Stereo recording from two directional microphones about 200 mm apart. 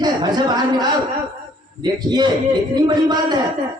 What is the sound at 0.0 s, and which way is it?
Speech, 20° right (ahead or behind).